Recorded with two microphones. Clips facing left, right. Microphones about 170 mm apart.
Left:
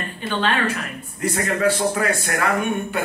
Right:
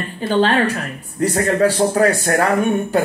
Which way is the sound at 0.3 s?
35° right (ahead or behind).